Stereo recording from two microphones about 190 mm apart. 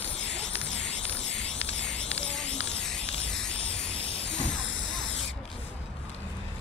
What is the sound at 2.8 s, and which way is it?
Static, 5° left (ahead or behind).